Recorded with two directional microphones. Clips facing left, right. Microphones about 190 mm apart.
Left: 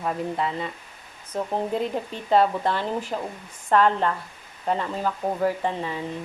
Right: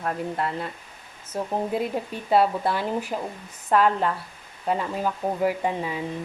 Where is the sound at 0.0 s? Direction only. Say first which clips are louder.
Left 1 dB; centre (ahead or behind).